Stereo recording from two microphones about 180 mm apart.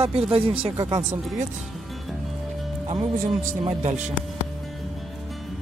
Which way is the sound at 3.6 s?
35° right (ahead or behind).